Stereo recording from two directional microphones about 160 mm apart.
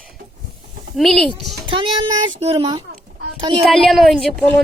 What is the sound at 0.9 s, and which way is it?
Speech, centre (ahead or behind).